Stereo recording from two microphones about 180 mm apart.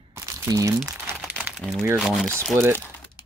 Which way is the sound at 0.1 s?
20° right (ahead or behind).